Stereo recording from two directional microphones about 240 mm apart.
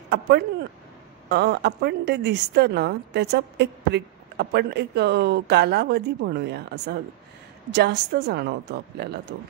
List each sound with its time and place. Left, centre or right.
0.1 s a woman's voice: right